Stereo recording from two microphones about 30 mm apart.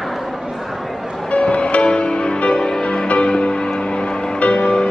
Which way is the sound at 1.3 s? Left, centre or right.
Left.